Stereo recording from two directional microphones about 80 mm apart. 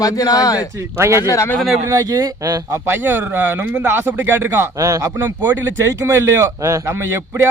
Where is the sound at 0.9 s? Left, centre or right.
Right.